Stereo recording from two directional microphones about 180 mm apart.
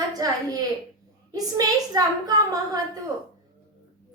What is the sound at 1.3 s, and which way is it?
A woman's voice, 20° right (ahead or behind).